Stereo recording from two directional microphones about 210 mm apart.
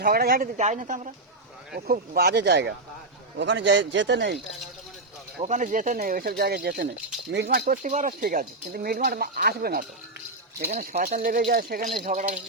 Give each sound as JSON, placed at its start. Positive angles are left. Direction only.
{"t": 0.0, "sound": "speech", "side_deg": -45}
{"t": 1.7, "sound": "speech", "side_deg": -50}
{"t": 5.4, "sound": "speech", "side_deg": -35}
{"t": 7.6, "sound": "speech", "side_deg": -40}